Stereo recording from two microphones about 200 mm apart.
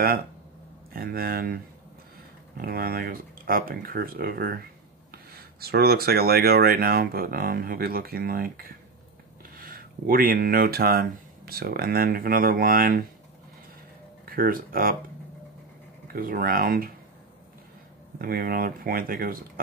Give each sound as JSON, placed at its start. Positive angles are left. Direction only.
{"t": 0.9, "sound": "speech", "side_deg": -50}
{"t": 14.2, "sound": "speech", "side_deg": -45}
{"t": 16.1, "sound": "speech", "side_deg": -45}
{"t": 18.2, "sound": "speech", "side_deg": -50}